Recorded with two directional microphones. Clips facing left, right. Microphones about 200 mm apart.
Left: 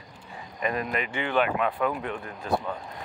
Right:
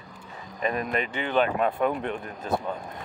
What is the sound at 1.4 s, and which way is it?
Speech, 40° right (ahead or behind).